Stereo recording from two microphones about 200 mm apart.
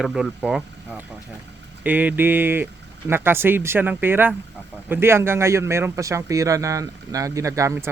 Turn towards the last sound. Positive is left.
turn(degrees=-15)  # may be behind; listen again after turning